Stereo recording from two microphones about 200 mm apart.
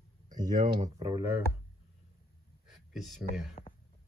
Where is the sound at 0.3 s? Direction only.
40° right (ahead or behind).